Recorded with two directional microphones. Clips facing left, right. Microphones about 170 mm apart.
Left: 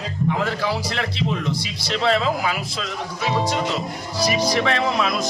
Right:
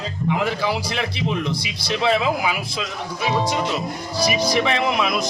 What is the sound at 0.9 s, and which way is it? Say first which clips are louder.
Speech: right 1 dB; 15° right (ahead or behind).